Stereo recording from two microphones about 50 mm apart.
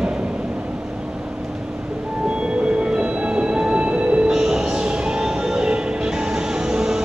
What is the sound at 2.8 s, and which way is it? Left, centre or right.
Music, right.